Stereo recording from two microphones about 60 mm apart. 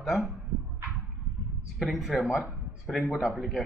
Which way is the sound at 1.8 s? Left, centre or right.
Centre.